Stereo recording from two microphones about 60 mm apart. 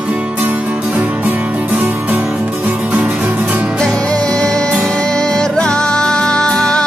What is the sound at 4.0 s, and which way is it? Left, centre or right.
Music, centre.